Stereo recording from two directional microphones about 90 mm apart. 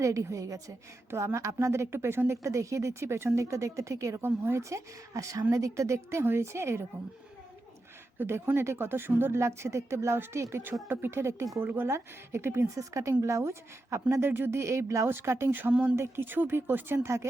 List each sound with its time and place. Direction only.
0.0 s a woman's voice: 35° right (ahead or behind)
8.2 s a woman's voice: 25° right (ahead or behind)